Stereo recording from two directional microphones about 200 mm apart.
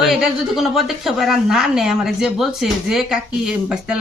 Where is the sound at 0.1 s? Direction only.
Centre (ahead or behind).